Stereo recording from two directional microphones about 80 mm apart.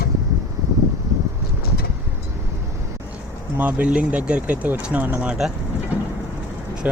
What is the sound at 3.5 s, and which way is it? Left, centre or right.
Speech, centre.